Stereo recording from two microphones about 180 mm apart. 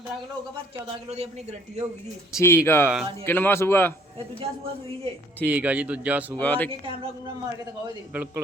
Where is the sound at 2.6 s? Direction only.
15° left (ahead or behind).